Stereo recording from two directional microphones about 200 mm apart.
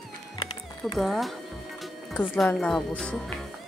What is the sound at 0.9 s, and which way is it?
A woman's voice, centre (ahead or behind).